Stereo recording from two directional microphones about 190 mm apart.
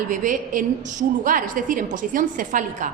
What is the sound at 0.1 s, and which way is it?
A woman's voice, 45° right (ahead or behind).